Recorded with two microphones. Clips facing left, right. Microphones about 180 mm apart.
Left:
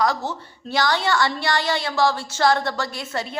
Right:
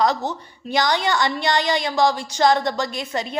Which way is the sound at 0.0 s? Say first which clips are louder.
Right 2 dB; 20° right (ahead or behind).